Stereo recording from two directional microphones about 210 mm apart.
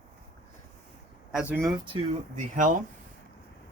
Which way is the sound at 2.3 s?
35° right (ahead or behind).